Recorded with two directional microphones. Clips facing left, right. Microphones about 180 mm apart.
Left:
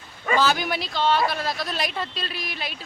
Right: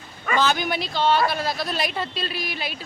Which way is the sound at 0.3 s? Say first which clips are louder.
Right 1 dB; 5° left (ahead or behind).